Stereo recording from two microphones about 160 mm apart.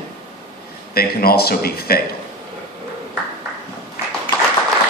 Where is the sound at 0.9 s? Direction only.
75° left (ahead or behind).